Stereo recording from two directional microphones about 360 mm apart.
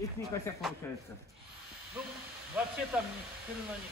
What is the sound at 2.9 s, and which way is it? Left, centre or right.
Speech, centre.